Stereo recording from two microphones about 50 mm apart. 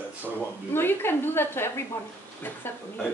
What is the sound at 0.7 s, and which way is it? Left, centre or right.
A woman's voice, left.